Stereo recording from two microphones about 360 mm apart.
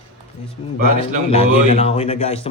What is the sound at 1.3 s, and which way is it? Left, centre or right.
Speech, centre.